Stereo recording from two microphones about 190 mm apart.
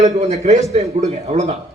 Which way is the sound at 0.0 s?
35° right (ahead or behind).